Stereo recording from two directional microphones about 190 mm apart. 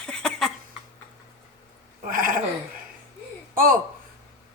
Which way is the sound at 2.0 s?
45° right (ahead or behind).